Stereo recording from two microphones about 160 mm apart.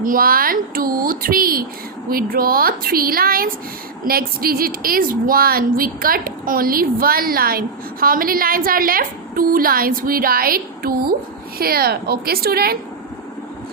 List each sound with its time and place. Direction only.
0.0 s a woman's voice: 60° right (ahead or behind)